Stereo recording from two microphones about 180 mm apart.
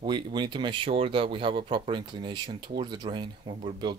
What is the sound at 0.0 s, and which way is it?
Speech, 25° right (ahead or behind).